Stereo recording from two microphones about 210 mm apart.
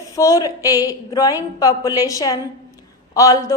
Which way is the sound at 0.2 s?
15° left (ahead or behind).